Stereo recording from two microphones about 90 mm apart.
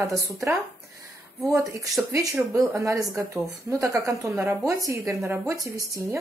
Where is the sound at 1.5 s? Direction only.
40° right (ahead or behind).